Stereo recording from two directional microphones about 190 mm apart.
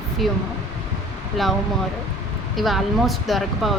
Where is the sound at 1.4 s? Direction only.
Centre (ahead or behind).